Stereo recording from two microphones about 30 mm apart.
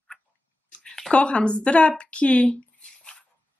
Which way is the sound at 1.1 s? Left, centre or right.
Left.